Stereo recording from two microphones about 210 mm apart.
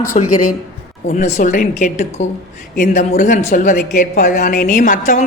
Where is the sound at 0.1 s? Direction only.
30° left (ahead or behind).